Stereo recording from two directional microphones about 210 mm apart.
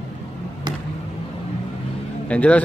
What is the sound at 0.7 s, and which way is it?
Vehicle, 20° right (ahead or behind).